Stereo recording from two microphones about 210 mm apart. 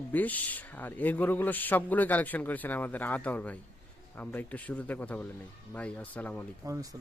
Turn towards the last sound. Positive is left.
turn(degrees=-15)  # may be behind; listen again after turning